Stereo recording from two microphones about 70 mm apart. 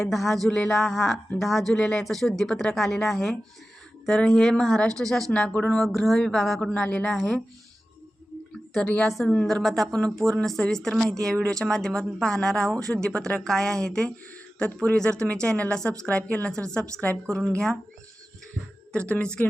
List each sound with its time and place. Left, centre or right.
0.0 s speech: centre
5.8 s speech: centre
9.0 s a woman's voice: centre
18.9 s speech: centre